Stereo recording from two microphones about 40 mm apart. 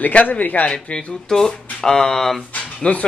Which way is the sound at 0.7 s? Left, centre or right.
Left.